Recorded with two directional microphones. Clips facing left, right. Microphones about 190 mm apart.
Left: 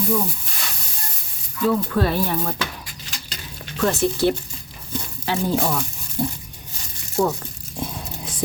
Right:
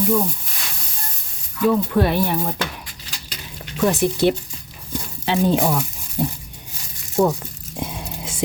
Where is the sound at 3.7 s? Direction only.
15° right (ahead or behind).